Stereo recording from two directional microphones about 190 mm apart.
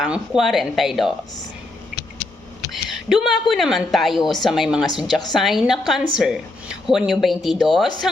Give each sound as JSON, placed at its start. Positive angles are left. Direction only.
{"t": 0.0, "sound": "a woman's voice", "side_deg": 0}
{"t": 2.7, "sound": "a woman's voice", "side_deg": 0}